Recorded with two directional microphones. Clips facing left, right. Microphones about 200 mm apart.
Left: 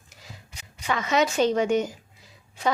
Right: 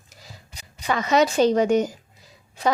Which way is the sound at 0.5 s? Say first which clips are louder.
Right 3 dB; 40° right (ahead or behind).